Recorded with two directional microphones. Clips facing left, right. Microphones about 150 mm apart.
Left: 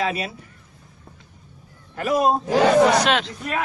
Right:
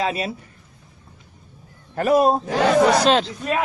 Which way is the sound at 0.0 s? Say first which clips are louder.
Right 1 dB; 30° right (ahead or behind).